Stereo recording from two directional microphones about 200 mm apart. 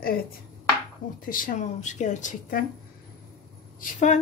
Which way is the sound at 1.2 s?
45° left (ahead or behind).